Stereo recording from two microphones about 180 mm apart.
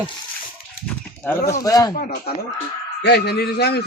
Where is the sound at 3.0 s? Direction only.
65° left (ahead or behind).